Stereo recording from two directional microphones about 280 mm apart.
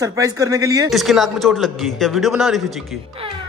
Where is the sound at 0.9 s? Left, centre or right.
Centre.